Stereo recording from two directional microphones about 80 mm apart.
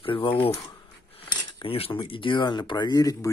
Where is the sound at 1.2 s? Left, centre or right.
Left.